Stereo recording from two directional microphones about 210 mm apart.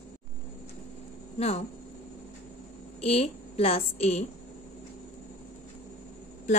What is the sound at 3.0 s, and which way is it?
A woman's voice, 30° left (ahead or behind).